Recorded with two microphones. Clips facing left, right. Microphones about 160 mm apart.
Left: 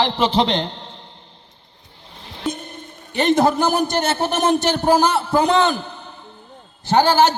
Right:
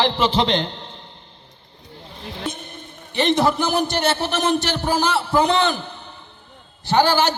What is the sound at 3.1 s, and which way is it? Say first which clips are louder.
A man's voice: left 2 dB; 45° left (ahead or behind).